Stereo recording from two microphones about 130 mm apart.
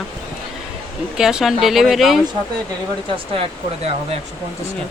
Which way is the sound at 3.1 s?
45° right (ahead or behind).